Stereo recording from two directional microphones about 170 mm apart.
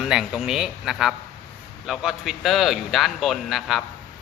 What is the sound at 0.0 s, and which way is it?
A man's voice, 5° right (ahead or behind).